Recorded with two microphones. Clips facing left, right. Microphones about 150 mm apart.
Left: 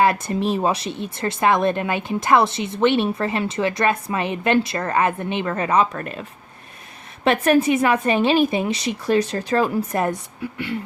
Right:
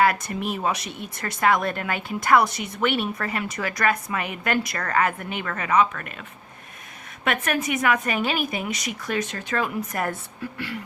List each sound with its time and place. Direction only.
0.0 s speech: 25° left (ahead or behind)
7.3 s speech: 30° left (ahead or behind)